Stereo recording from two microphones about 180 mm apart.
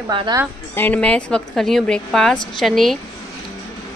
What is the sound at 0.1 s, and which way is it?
Speech, 25° right (ahead or behind).